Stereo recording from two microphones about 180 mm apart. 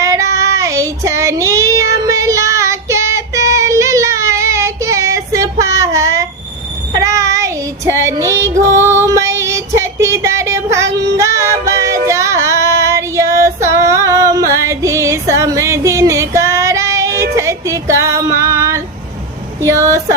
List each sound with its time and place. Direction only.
0.0 s child singing: 15° right (ahead or behind)
17.3 s music: 15° right (ahead or behind)
18.0 s female singing: 15° right (ahead or behind)
19.6 s a sound: 15° right (ahead or behind)